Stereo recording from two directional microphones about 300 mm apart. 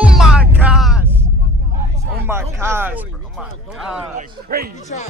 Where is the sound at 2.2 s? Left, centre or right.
Centre.